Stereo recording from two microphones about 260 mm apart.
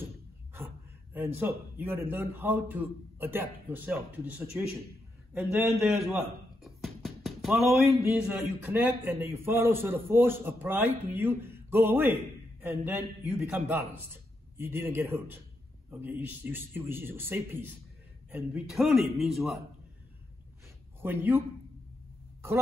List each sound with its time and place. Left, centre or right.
1.4 s a man's voice: centre
21.0 s a man's voice: centre